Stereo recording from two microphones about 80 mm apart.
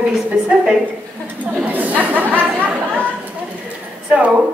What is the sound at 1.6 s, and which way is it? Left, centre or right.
Chatter, centre.